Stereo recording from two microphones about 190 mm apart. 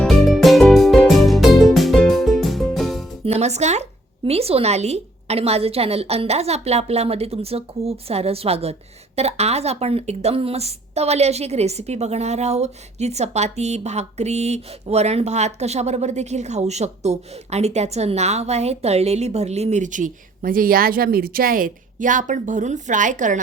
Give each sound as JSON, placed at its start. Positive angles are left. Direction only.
{"t": 0.0, "sound": "music", "side_deg": 0}
{"t": 3.2, "sound": "speech", "side_deg": -35}